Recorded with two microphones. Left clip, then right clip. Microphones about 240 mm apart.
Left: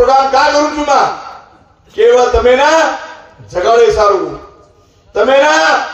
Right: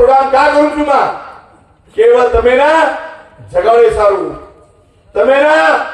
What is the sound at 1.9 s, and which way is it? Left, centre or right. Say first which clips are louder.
Speech: even; left.